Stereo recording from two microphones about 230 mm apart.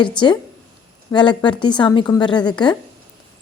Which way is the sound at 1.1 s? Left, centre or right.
Centre.